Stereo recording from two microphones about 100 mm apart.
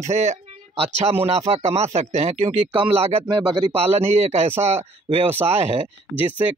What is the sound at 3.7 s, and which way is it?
Speech, 90° right.